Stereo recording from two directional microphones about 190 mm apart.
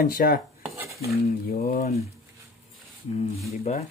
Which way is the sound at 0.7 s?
15° right (ahead or behind).